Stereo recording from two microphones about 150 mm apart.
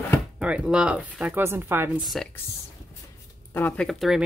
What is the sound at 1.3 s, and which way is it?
Speech, 15° right (ahead or behind).